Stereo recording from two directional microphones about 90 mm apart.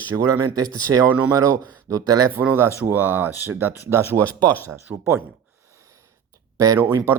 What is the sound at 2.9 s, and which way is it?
Speech, 20° right (ahead or behind).